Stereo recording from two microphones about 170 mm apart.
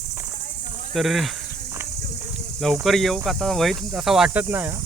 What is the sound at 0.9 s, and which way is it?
Speech, centre (ahead or behind).